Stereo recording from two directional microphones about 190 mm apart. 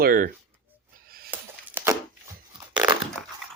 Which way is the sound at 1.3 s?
10° right (ahead or behind).